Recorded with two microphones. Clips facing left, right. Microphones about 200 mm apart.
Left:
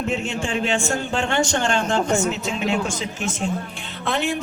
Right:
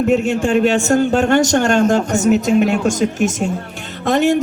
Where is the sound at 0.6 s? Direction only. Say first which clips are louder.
Right 9 dB; 40° right (ahead or behind).